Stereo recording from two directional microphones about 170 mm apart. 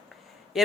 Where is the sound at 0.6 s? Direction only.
Centre (ahead or behind).